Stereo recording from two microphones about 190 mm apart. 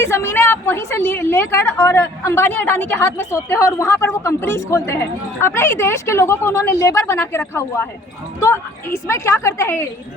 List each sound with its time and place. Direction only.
0.0 s a woman's voice: 15° left (ahead or behind)